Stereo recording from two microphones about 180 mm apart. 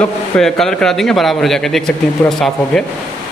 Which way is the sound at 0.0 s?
5° left (ahead or behind).